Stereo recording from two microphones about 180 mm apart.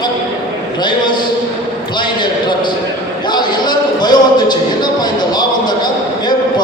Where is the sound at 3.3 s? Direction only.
25° left (ahead or behind).